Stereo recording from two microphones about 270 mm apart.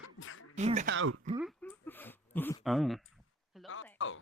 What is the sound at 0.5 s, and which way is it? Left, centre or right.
Speech, right.